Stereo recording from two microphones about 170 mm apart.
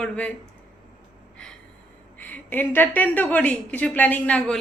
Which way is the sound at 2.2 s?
10° left (ahead or behind).